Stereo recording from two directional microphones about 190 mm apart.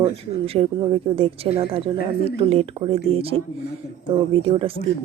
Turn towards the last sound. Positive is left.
turn(degrees=-30)  # may be behind; listen again after turning